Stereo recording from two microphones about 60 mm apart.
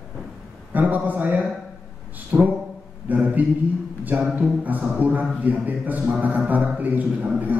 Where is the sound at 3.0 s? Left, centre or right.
Right.